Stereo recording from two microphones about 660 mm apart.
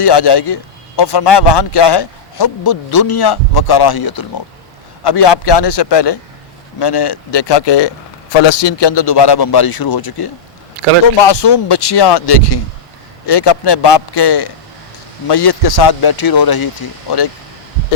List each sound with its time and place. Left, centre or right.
0.0 s speech: left